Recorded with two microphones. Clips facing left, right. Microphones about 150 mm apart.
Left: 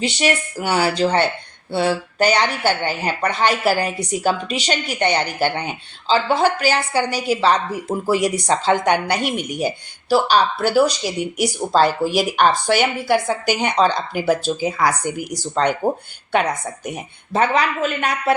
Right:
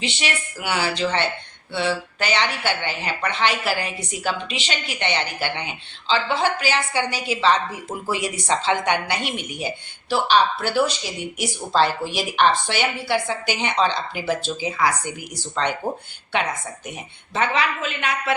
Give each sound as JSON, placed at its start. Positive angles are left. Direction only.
{"t": 0.0, "sound": "speech", "side_deg": 40}